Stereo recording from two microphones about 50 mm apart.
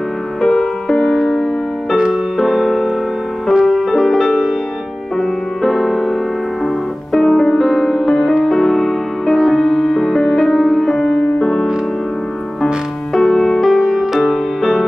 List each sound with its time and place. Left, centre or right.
0.4 s music: centre
13.1 s music: centre